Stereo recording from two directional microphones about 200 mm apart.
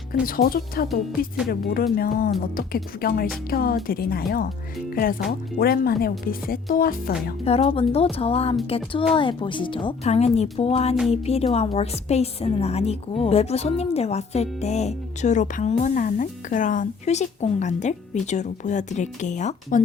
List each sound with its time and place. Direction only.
0.1 s speech: 45° left (ahead or behind)
5.5 s speech: 50° left (ahead or behind)
7.4 s a woman's voice: 30° left (ahead or behind)